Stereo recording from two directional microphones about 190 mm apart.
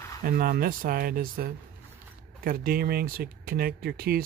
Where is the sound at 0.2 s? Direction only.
50° right (ahead or behind).